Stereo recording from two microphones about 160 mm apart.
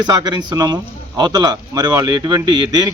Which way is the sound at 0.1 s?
25° right (ahead or behind).